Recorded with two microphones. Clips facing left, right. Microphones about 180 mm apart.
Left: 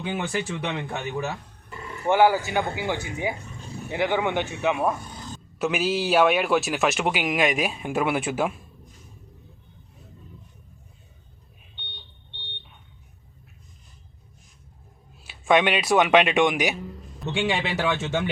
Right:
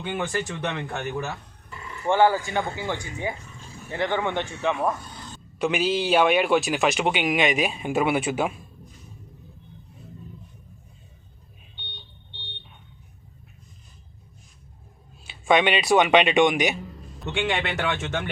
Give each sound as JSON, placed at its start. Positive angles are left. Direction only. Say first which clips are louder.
{"t": 0.0, "sound": "speech", "louder": "even", "side_deg": 10}
{"t": 15.2, "sound": "speech", "louder": "even", "side_deg": 0}